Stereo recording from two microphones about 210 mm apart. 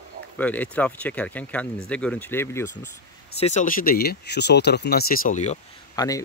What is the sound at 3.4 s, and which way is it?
Speech, 35° left (ahead or behind).